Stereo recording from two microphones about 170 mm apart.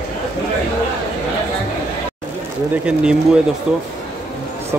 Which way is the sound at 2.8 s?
5° right (ahead or behind).